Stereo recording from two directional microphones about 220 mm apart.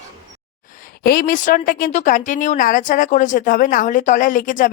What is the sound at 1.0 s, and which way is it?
A woman's voice, 40° left (ahead or behind).